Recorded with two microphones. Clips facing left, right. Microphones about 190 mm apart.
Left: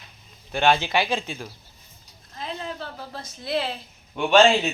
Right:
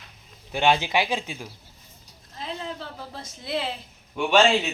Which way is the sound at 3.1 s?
20° right (ahead or behind).